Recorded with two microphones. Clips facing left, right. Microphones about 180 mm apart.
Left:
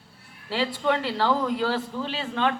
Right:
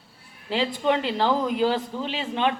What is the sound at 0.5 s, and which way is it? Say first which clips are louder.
A man's voice: right 2 dB; 20° right (ahead or behind).